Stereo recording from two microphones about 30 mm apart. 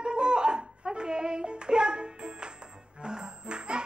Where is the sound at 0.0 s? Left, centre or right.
Right.